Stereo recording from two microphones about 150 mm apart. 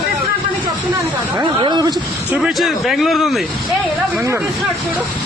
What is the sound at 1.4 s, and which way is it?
Speech, 30° right (ahead or behind).